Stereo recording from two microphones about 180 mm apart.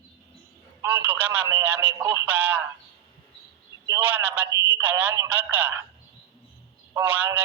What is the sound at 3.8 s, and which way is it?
Speech, 15° right (ahead or behind).